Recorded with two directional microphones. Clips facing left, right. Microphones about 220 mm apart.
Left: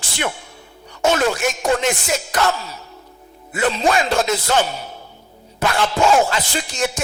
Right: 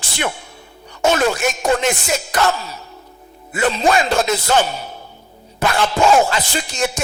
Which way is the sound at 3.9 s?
10° right (ahead or behind).